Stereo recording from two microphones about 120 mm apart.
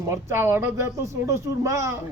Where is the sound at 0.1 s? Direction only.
20° right (ahead or behind).